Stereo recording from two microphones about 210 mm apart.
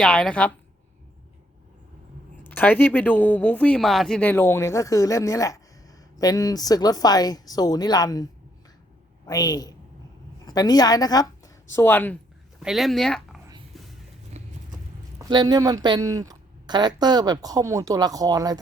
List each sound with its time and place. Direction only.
0.0 s speech: 5° left (ahead or behind)
2.4 s a woman's voice: 10° left (ahead or behind)
12.5 s speech: centre (ahead or behind)
13.7 s a sound: centre (ahead or behind)
14.4 s horse: 30° right (ahead or behind)
15.2 s speech: 20° right (ahead or behind)